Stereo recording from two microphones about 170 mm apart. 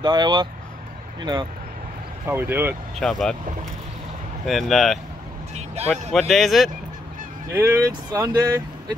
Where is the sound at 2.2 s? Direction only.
15° right (ahead or behind).